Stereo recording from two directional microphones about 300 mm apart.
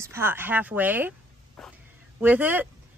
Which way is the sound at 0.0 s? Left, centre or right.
Centre.